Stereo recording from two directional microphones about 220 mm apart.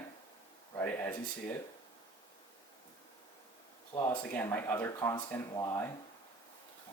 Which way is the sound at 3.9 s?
25° left (ahead or behind).